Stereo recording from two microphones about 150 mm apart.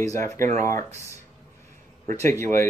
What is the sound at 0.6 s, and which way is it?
Speech, 20° left (ahead or behind).